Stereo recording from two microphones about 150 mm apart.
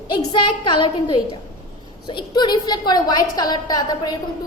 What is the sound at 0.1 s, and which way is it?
A woman's voice, 30° left (ahead or behind).